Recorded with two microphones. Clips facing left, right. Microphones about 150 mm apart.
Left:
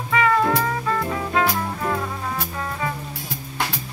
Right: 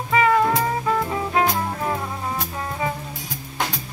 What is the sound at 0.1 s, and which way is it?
Music, 20° right (ahead or behind).